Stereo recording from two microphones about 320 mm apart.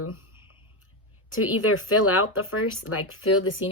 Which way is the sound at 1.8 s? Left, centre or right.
Left.